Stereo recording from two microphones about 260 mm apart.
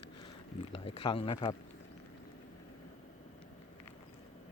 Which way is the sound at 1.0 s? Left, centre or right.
Centre.